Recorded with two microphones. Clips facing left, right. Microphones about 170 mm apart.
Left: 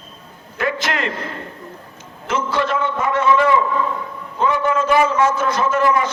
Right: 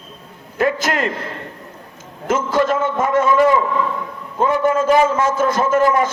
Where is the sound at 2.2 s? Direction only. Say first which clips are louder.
Right 4 dB; 45° right (ahead or behind).